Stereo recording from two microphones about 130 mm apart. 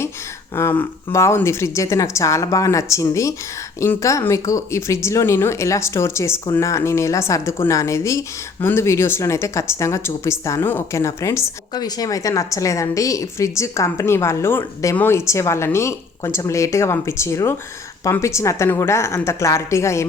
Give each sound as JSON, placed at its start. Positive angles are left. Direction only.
{"t": 0.5, "sound": "a woman's voice", "side_deg": 15}